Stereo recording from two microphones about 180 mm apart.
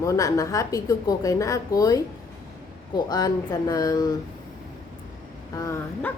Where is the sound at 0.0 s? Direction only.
20° left (ahead or behind).